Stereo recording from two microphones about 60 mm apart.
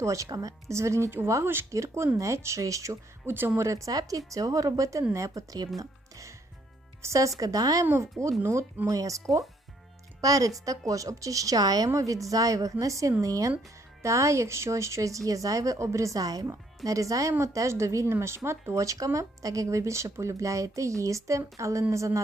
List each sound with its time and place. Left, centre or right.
0.0 s speech: right
1.7 s speech: right
3.2 s speech: right
3.7 s a woman's voice: right
5.8 s music: right
7.0 s a woman's voice: right
8.2 s speech: centre
8.9 s a woman's voice: right
10.2 s speech: right
10.7 s a woman's voice: right
11.9 s a woman's voice: right
12.8 s a woman's voice: right
14.0 s speech: right